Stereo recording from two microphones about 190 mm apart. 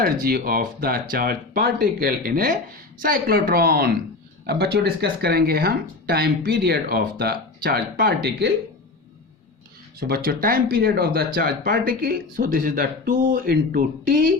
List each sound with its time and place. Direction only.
0.0 s speech: 50° right (ahead or behind)
10.0 s speech: 50° right (ahead or behind)